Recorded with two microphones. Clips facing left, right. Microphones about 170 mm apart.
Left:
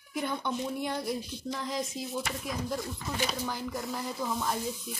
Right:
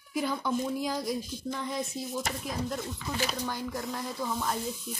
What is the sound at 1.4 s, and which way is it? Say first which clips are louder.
Speech: left 1 dB; 5° right (ahead or behind).